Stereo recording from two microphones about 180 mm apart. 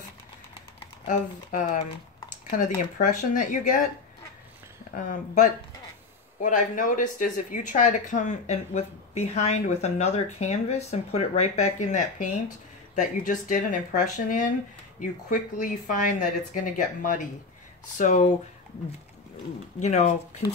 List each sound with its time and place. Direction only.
1.0 s speech: 45° left (ahead or behind)
4.9 s speech: 45° left (ahead or behind)
19.8 s speech: 40° left (ahead or behind)